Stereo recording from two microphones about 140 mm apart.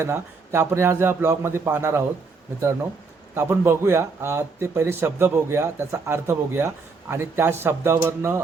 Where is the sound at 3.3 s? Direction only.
20° right (ahead or behind).